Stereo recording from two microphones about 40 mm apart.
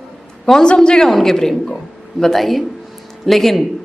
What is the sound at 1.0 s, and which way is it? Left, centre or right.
A woman's voice, centre.